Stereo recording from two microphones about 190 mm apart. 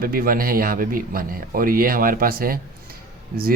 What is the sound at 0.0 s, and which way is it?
A man's voice, 50° right (ahead or behind).